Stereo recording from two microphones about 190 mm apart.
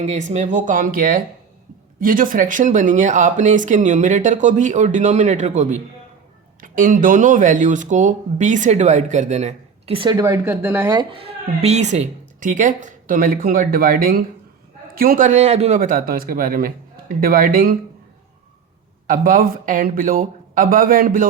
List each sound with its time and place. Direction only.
0.0 s speech: 40° right (ahead or behind)
19.0 s speech: 45° right (ahead or behind)